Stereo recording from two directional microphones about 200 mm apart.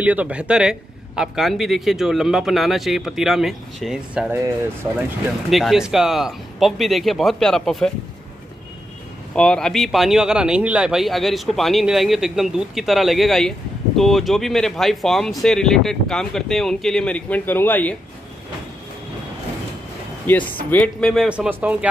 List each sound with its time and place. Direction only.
0.0 s speech: 5° right (ahead or behind)
5.5 s speech: centre (ahead or behind)
9.3 s speech: 5° left (ahead or behind)
20.3 s speech: 10° left (ahead or behind); by 21.7 s 10° right (ahead or behind)